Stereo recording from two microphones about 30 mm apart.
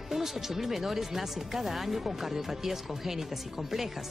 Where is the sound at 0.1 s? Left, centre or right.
Centre.